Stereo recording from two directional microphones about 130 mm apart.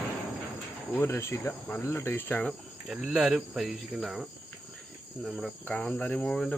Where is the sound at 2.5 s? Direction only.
5° right (ahead or behind).